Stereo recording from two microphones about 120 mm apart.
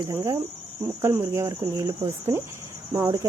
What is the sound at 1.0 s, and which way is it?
Speech, 20° right (ahead or behind).